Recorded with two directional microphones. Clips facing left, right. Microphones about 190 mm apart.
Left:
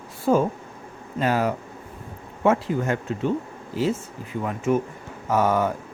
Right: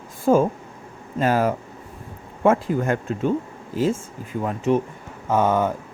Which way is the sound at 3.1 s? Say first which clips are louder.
Right 2 dB; 45° right (ahead or behind).